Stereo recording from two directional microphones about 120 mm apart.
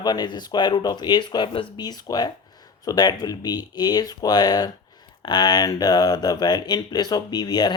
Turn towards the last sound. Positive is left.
turn(degrees=35)  # may be behind; listen again after turning